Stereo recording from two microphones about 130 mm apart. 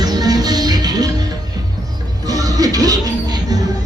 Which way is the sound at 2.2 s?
30° right (ahead or behind).